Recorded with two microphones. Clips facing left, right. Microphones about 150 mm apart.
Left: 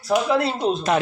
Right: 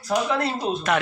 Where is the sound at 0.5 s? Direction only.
30° left (ahead or behind).